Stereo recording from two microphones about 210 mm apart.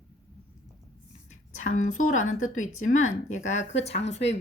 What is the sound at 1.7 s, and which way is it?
Speech, 40° left (ahead or behind).